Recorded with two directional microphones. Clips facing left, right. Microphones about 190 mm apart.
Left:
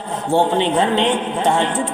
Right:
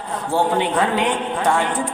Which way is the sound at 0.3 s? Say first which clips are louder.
Left 3 dB; 25° left (ahead or behind).